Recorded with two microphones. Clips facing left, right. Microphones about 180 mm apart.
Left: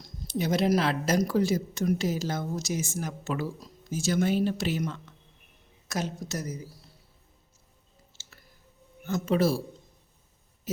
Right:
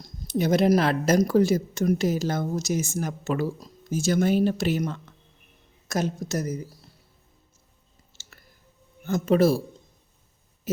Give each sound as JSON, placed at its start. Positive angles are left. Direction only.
{"t": 0.0, "sound": "speech", "side_deg": -50}
{"t": 8.2, "sound": "chewing", "side_deg": -50}
{"t": 9.0, "sound": "speech", "side_deg": -45}